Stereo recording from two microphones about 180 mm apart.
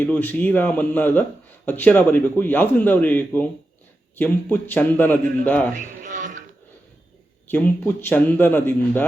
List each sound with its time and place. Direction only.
0.0 s a man's voice: 10° left (ahead or behind)
6.0 s a sound: 45° right (ahead or behind)
7.4 s a man's voice: 10° left (ahead or behind)